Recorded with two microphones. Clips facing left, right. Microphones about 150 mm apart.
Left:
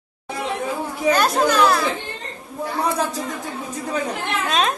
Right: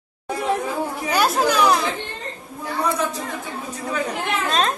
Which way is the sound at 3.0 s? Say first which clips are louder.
Left 1 dB; 35° left (ahead or behind).